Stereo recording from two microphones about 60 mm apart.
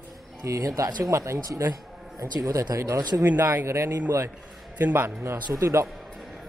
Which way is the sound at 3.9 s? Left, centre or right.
Right.